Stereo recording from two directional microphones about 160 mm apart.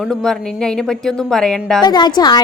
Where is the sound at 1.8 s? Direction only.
25° left (ahead or behind).